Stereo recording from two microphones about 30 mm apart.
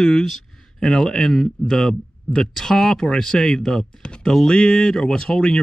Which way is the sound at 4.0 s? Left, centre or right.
Left.